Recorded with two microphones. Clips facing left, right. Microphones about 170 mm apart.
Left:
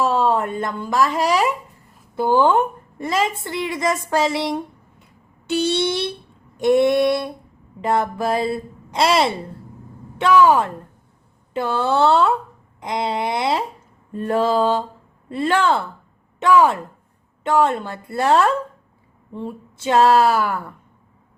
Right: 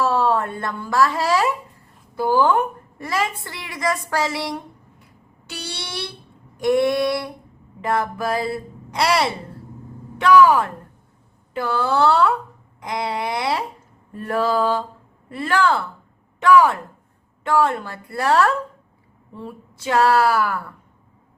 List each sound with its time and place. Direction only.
0.0 s a woman's voice: 20° left (ahead or behind)